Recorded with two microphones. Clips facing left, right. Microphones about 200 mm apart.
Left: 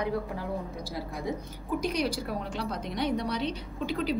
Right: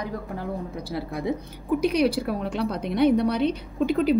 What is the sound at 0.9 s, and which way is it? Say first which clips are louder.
A woman's voice: right 7 dB; 65° right (ahead or behind).